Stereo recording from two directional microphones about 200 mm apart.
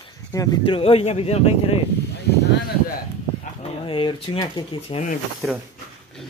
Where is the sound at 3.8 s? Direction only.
25° left (ahead or behind).